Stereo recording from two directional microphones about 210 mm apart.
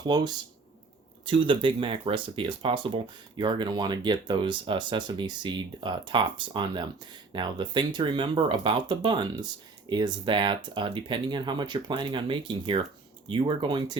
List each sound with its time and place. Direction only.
0.0 s speech: 20° right (ahead or behind)